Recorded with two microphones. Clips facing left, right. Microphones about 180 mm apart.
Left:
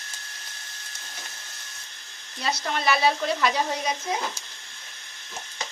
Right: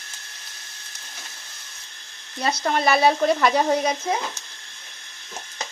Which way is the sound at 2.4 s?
50° right (ahead or behind).